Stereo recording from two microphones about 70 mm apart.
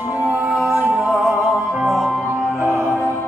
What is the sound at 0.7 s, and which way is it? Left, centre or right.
Music, right.